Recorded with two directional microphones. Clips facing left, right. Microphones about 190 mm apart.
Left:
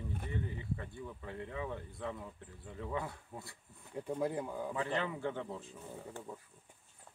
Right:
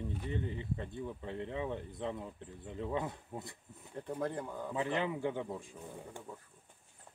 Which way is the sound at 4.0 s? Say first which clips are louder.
Left 2 dB; 10° left (ahead or behind).